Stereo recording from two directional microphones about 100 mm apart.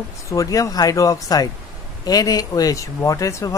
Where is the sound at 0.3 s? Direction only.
35° left (ahead or behind).